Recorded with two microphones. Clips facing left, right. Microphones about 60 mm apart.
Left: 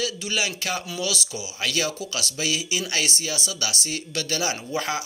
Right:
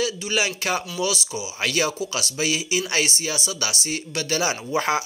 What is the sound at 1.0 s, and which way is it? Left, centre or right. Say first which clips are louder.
Speech: right 3 dB; centre.